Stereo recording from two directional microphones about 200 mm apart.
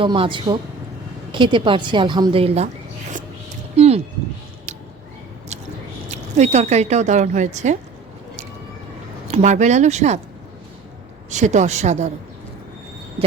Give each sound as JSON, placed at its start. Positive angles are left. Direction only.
{"t": 0.0, "sound": "a woman's voice", "side_deg": -25}
{"t": 3.8, "sound": "a sound", "side_deg": -30}
{"t": 6.1, "sound": "speech", "side_deg": -35}
{"t": 9.2, "sound": "speech", "side_deg": -35}
{"t": 11.3, "sound": "speech", "side_deg": -35}